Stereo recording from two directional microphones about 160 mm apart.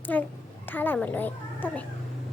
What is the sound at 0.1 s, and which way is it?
A child's voice, 10° left (ahead or behind).